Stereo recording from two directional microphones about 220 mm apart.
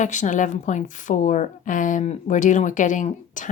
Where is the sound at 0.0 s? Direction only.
35° left (ahead or behind).